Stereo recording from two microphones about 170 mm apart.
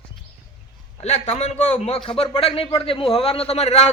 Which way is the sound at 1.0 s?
40° left (ahead or behind).